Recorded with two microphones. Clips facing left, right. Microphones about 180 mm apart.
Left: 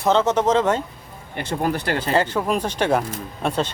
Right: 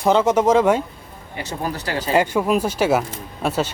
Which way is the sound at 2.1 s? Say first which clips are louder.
Right 4 dB; 10° right (ahead or behind).